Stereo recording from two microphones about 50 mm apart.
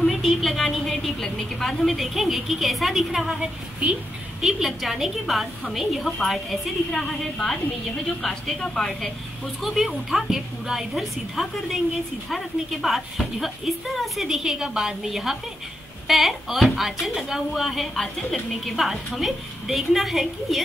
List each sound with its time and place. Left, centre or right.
0.0 s a woman's voice: centre
3.8 s speech: right
4.4 s a woman's voice: centre
9.6 s a woman's voice: centre
18.8 s a woman's voice: centre